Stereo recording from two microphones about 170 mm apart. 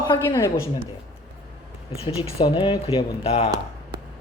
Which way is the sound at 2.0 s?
35° left (ahead or behind).